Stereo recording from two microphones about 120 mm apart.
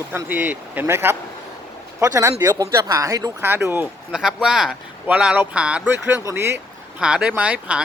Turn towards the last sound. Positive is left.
turn(degrees=-10)  # may be behind; listen again after turning